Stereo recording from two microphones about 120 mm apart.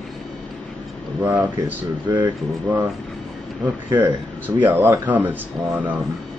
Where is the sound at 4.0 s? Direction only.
15° right (ahead or behind).